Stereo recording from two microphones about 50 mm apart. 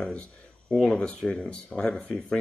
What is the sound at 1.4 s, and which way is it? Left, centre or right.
Speech, centre.